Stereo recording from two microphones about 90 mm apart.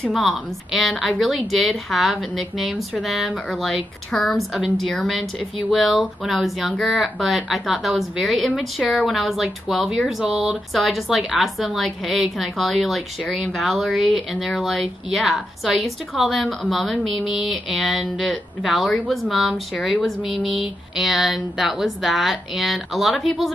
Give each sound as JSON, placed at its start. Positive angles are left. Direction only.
{"t": 0.0, "sound": "speech", "side_deg": 0}